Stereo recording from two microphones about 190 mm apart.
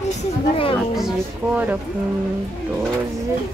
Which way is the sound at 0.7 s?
Centre (ahead or behind).